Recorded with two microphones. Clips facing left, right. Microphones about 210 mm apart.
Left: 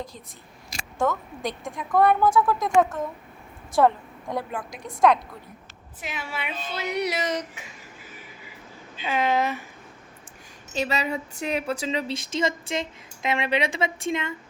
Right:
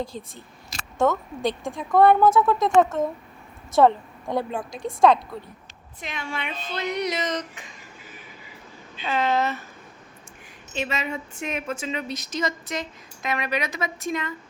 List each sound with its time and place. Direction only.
0.9 s speech: 25° right (ahead or behind)
6.0 s speech: 5° left (ahead or behind)
9.0 s speech: 10° left (ahead or behind)
10.8 s a woman's voice: 35° left (ahead or behind)